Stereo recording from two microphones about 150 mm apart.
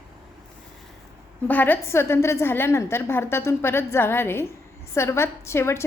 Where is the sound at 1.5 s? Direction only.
10° left (ahead or behind).